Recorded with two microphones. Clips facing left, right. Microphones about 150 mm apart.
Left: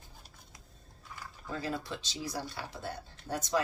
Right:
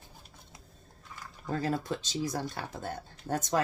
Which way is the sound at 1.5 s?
45° right (ahead or behind).